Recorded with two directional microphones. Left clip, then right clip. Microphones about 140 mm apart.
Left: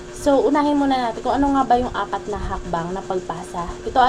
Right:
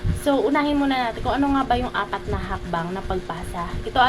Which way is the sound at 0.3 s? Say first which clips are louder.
Left 3 dB; 30° right (ahead or behind).